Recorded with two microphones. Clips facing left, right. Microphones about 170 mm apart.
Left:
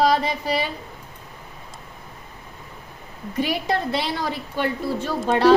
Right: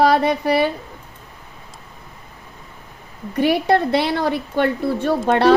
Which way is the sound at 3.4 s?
60° right (ahead or behind).